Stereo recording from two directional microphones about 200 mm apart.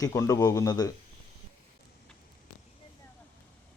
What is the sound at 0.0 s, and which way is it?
Speech, 15° left (ahead or behind).